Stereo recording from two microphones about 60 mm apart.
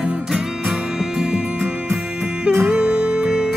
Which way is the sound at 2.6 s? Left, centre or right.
Centre.